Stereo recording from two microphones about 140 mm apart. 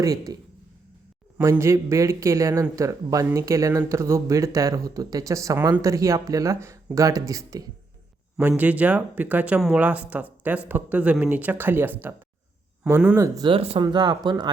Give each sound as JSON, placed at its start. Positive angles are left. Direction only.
{"t": 0.0, "sound": "speech", "side_deg": -25}
{"t": 1.4, "sound": "speech", "side_deg": -20}
{"t": 8.4, "sound": "speech", "side_deg": -15}
{"t": 13.1, "sound": "speech", "side_deg": -25}
{"t": 13.5, "sound": "speech", "side_deg": -40}
{"t": 13.8, "sound": "speech", "side_deg": -30}